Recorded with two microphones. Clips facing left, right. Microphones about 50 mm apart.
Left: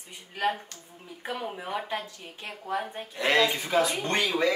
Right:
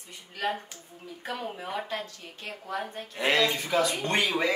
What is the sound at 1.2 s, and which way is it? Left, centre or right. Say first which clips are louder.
Speech: left 1 dB; centre.